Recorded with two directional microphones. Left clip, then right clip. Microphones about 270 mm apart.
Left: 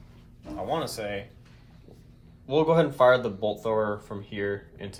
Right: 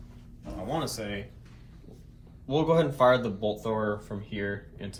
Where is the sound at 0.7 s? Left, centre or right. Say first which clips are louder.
Left 2 dB; left.